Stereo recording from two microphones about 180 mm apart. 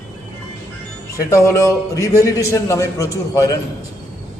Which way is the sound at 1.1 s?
15° left (ahead or behind).